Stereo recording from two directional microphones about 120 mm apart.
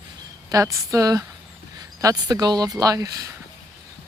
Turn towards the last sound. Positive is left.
turn(degrees=-30)  # may be behind; listen again after turning